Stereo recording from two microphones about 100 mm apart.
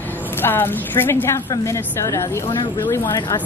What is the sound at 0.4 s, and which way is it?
Speech, 20° left (ahead or behind).